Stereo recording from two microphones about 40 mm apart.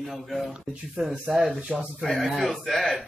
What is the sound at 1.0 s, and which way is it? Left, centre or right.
Speech, right.